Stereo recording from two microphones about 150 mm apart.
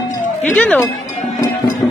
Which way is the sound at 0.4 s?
10° left (ahead or behind).